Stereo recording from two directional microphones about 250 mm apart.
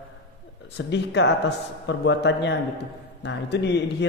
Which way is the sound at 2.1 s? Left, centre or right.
Left.